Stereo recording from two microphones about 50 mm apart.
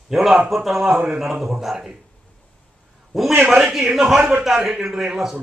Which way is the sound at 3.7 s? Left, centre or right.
Centre.